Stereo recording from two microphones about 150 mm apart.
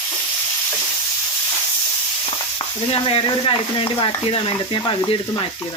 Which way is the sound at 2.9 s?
40° left (ahead or behind).